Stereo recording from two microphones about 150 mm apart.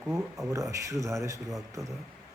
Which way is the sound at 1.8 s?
Centre (ahead or behind).